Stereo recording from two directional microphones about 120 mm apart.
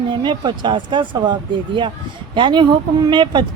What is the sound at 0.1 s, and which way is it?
Speech, 40° right (ahead or behind).